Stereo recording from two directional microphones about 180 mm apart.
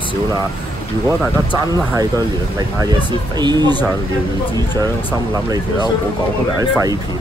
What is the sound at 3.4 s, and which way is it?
Speech, 25° right (ahead or behind).